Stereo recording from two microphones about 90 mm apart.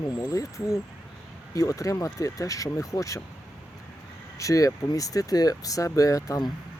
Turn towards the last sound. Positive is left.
turn(degrees=40)  # may be behind; listen again after turning